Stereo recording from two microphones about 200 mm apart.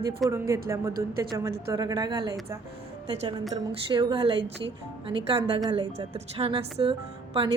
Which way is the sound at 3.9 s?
25° right (ahead or behind).